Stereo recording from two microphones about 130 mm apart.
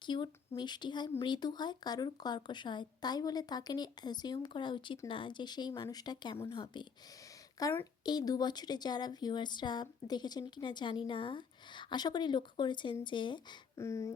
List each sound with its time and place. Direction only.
0.0 s speech: 35° left (ahead or behind)
13.7 s speech: 20° left (ahead or behind)